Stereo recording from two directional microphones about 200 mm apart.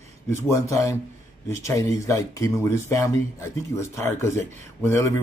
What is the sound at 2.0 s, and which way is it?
Speech, 15° left (ahead or behind).